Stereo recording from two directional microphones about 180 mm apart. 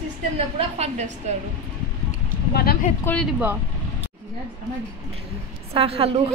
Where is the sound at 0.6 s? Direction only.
35° right (ahead or behind).